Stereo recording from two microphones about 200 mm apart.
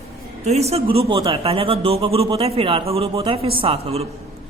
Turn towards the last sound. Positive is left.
turn(degrees=-30)  # may be behind; listen again after turning